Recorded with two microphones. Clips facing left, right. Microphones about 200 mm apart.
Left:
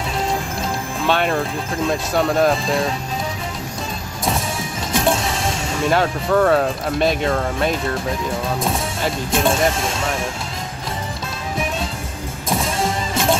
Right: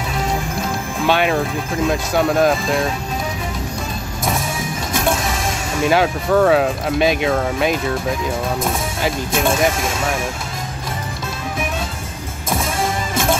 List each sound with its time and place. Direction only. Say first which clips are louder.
1.0 s speech: right 2 dB; 5° right (ahead or behind)
5.9 s speech: right 2 dB; 5° right (ahead or behind)
9.0 s speech: right 1 dB; 5° right (ahead or behind)
12.8 s music: even; 25° left (ahead or behind)